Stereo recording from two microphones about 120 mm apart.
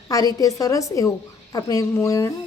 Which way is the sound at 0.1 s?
30° left (ahead or behind).